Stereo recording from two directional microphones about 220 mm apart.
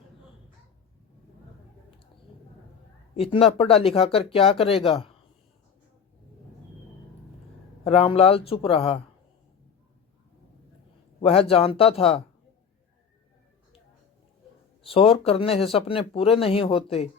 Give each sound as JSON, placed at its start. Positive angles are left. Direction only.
{"t": 3.2, "sound": "speech", "side_deg": 25}
{"t": 7.9, "sound": "speech", "side_deg": 25}
{"t": 11.2, "sound": "speech", "side_deg": 25}
{"t": 14.9, "sound": "speech", "side_deg": 25}